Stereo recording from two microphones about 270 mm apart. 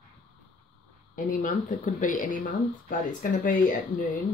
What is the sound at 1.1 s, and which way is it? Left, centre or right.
Speech, left.